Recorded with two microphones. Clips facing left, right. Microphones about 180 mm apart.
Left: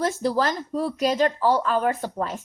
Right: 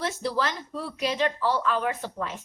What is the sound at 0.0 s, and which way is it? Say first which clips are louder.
A child's voice: left 5 dB; 45° left (ahead or behind).